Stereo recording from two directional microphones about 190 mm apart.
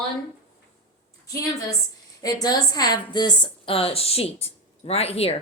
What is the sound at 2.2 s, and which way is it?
Speech, 20° left (ahead or behind).